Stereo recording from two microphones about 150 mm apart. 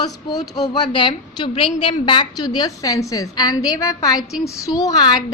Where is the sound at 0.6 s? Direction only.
30° left (ahead or behind).